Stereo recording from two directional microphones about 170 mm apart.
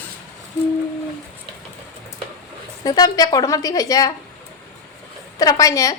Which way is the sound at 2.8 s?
20° left (ahead or behind).